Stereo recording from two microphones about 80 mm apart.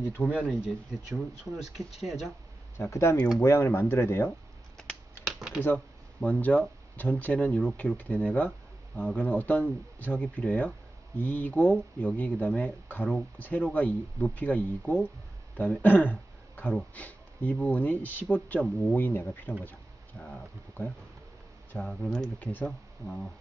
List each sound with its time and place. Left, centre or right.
0.0 s speech: left
0.5 s speech: centre
2.8 s speech: left
5.2 s computer keyboard: centre
6.2 s speech: centre
20.8 s speech: left
21.7 s speech: centre
22.4 s speech: centre